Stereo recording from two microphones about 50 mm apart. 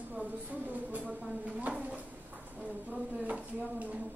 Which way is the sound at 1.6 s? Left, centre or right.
Right.